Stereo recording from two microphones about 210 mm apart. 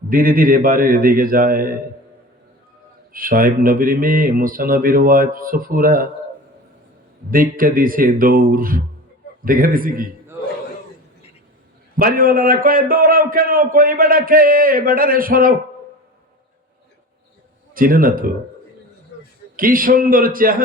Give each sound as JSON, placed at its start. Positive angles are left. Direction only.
{"t": 0.1, "sound": "a man's voice", "side_deg": -40}
{"t": 3.1, "sound": "a man's voice", "side_deg": -40}
{"t": 7.3, "sound": "speech", "side_deg": -40}
{"t": 11.9, "sound": "a man's voice", "side_deg": -45}
{"t": 17.7, "sound": "a man's voice", "side_deg": -40}
{"t": 19.5, "sound": "speech", "side_deg": -40}